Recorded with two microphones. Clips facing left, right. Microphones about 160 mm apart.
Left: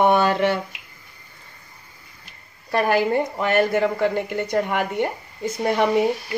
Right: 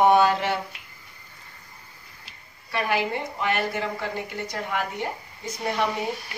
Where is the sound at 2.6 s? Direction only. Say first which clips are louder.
Left 6 dB; 45° left (ahead or behind).